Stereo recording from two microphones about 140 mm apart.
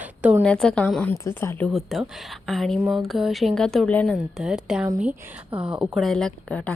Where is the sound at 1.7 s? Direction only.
Centre (ahead or behind).